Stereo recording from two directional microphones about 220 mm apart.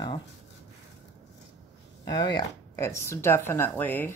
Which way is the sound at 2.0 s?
20° left (ahead or behind).